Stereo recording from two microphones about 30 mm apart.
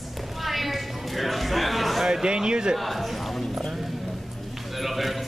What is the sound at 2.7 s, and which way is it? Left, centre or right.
Clip-clop, centre.